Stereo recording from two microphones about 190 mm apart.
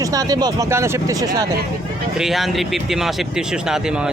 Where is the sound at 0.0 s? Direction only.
20° right (ahead or behind).